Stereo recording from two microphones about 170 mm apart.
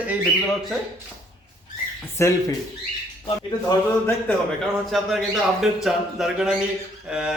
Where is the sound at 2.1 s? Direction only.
20° left (ahead or behind).